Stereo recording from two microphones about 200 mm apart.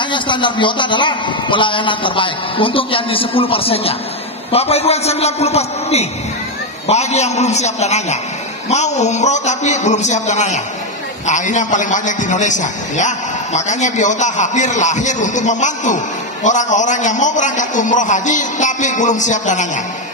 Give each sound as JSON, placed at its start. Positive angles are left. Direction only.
{"t": 0.1, "sound": "a man's voice", "side_deg": 25}